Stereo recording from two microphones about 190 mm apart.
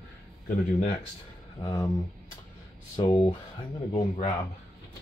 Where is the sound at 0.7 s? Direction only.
35° left (ahead or behind).